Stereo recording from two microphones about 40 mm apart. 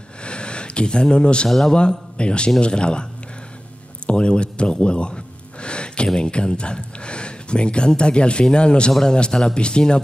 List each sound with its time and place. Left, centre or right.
0.2 s a sound: left
1.7 s speech: left
4.1 s music: left
6.0 s speech: centre